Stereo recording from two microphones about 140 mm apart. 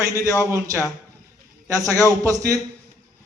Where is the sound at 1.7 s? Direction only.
25° right (ahead or behind).